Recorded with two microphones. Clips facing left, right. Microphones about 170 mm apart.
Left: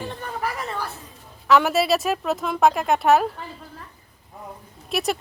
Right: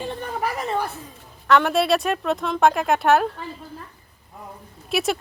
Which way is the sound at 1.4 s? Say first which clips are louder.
Even; 5° left (ahead or behind).